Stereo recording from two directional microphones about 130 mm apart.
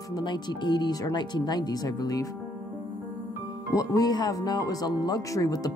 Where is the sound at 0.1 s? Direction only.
35° left (ahead or behind).